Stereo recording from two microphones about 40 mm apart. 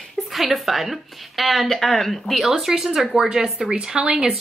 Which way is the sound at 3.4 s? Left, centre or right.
Right.